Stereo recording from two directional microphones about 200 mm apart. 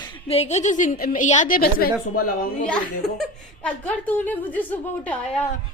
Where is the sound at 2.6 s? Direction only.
5° left (ahead or behind).